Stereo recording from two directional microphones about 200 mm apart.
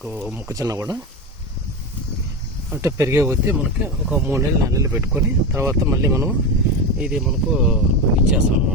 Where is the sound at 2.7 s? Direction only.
15° right (ahead or behind).